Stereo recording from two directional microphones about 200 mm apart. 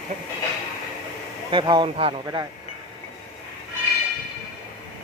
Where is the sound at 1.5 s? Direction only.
25° right (ahead or behind).